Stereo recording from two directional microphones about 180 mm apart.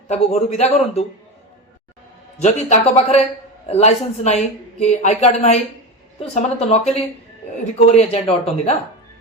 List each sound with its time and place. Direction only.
0.1 s a woman's voice: 35° left (ahead or behind)
2.4 s a woman's voice: 40° left (ahead or behind)